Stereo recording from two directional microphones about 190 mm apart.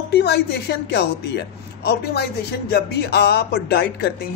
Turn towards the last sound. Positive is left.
turn(degrees=60)  # may be behind; listen again after turning